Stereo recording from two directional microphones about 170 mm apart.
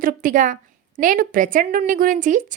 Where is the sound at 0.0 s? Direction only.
55° right (ahead or behind).